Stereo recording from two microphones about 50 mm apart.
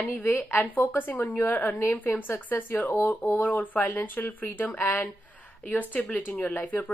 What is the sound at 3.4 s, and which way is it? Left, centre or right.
Speech, left.